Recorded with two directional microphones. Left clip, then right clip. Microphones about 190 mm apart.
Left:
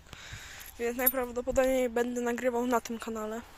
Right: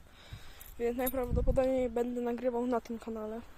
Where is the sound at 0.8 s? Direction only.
10° right (ahead or behind).